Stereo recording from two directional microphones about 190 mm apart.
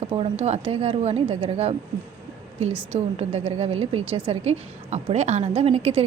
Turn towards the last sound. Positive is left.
turn(degrees=-30)  # may be behind; listen again after turning